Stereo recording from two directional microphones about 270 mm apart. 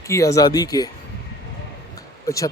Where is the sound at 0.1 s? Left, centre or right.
Centre.